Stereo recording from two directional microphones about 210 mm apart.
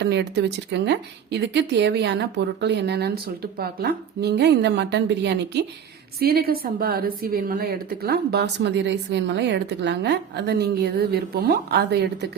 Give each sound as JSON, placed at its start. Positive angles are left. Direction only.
{"t": 0.0, "sound": "a woman's voice", "side_deg": -55}